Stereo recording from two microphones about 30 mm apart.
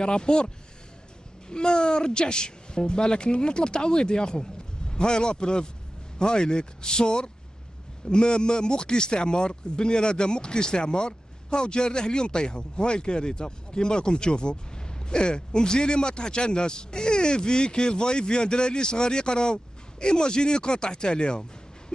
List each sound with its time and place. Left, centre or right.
0.0 s speech: left
1.5 s speech: left